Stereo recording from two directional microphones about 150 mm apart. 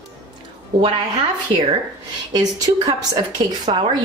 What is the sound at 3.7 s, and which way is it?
Speech, 45° right (ahead or behind).